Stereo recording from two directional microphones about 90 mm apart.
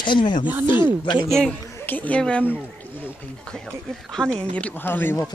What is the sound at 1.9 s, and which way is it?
Speech, 15° left (ahead or behind).